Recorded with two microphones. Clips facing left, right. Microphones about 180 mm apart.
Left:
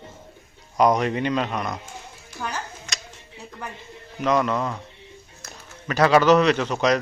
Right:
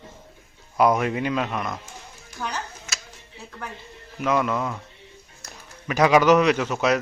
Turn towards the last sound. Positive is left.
turn(degrees=-10)  # may be behind; listen again after turning